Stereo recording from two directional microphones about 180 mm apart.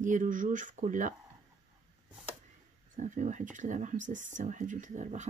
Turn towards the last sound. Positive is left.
turn(degrees=-40)  # may be behind; listen again after turning